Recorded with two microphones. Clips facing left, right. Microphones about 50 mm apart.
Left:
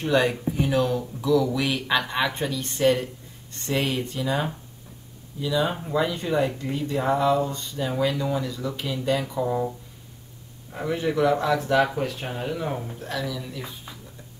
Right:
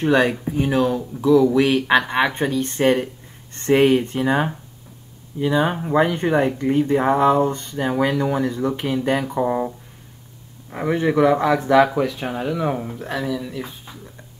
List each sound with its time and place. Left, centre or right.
0.0 s speech: right
0.3 s speech: centre; by 9.7 s right
10.7 s speech: right
11.8 s speech: right
12.5 s speech: right
13.3 s speech: right